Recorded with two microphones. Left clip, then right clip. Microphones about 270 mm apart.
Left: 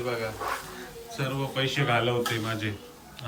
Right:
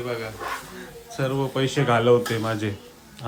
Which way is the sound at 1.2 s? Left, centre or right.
Centre.